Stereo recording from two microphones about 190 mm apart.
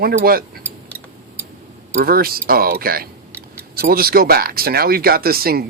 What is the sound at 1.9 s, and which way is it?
Speech, 50° right (ahead or behind).